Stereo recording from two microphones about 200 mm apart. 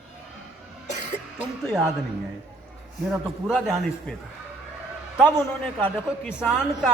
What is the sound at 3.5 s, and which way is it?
Speech, centre (ahead or behind).